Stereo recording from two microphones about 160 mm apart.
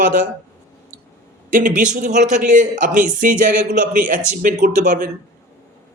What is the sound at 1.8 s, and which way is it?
A man's voice, 50° right (ahead or behind).